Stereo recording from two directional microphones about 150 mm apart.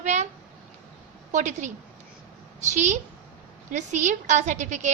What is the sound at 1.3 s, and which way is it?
A woman's voice, 55° right (ahead or behind).